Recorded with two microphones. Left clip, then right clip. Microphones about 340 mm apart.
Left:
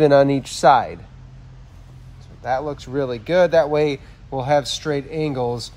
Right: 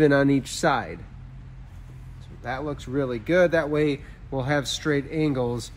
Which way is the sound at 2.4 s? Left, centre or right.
Centre.